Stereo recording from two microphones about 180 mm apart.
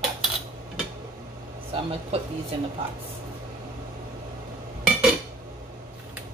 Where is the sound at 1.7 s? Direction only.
35° right (ahead or behind).